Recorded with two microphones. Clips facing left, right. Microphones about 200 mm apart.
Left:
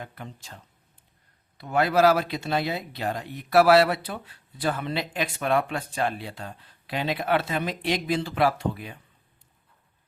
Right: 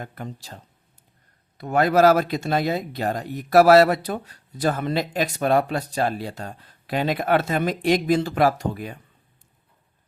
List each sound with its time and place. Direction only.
0.0 s speech: 45° right (ahead or behind)
1.5 s speech: 45° right (ahead or behind)